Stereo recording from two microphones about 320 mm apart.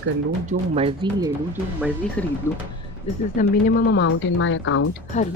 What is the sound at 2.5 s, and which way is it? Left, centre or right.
Speech, centre.